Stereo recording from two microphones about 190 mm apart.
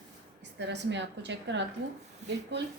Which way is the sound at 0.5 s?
70° right (ahead or behind).